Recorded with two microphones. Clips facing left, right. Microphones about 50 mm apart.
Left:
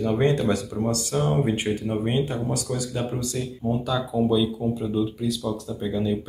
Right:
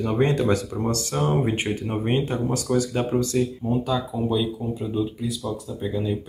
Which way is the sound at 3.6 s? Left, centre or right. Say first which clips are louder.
Right 1 dB; right.